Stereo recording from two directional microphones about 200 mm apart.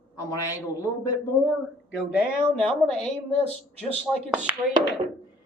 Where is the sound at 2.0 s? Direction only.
5° right (ahead or behind).